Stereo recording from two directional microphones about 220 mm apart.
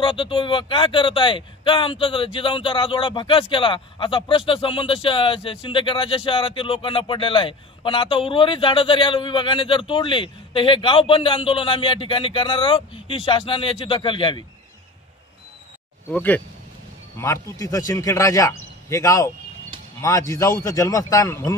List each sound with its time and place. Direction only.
0.0 s speech: 25° left (ahead or behind)
16.1 s speech: 5° left (ahead or behind)